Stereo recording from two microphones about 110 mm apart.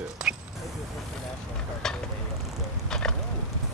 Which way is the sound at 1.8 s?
5° left (ahead or behind).